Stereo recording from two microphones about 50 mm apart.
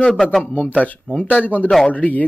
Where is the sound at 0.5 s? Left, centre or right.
Left.